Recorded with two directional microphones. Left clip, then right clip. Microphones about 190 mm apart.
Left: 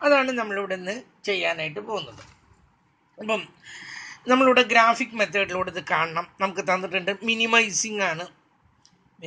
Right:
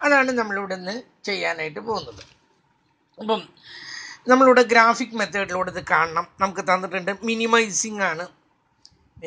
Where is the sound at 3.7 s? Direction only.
10° right (ahead or behind).